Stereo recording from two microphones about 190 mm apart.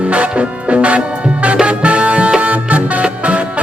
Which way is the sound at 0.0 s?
5° right (ahead or behind).